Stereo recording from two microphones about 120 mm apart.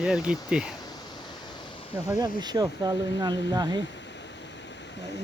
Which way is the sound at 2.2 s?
35° right (ahead or behind).